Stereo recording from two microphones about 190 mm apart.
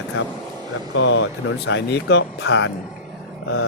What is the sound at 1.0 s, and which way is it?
Speech, 75° left (ahead or behind).